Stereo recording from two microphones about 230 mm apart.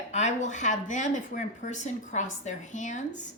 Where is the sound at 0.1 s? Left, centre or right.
Left.